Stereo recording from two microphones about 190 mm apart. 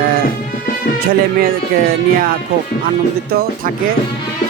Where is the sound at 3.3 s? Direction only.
55° right (ahead or behind).